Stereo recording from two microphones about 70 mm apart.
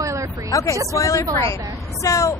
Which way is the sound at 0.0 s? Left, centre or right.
Right.